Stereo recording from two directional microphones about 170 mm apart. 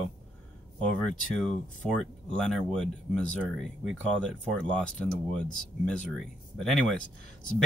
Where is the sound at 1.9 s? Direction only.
5° left (ahead or behind).